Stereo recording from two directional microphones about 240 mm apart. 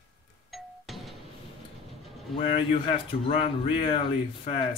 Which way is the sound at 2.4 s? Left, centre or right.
Left.